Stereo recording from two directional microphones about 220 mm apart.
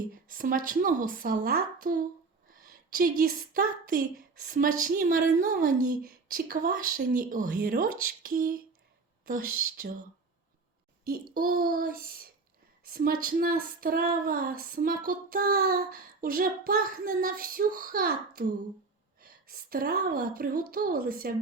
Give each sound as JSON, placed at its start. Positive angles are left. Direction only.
{"t": 0.1, "sound": "female singing", "side_deg": -40}
{"t": 2.5, "sound": "a woman's voice", "side_deg": -40}
{"t": 4.4, "sound": "female singing", "side_deg": -40}
{"t": 11.3, "sound": "female singing", "side_deg": -40}
{"t": 12.8, "sound": "a woman's voice", "side_deg": -40}
{"t": 13.2, "sound": "female singing", "side_deg": -40}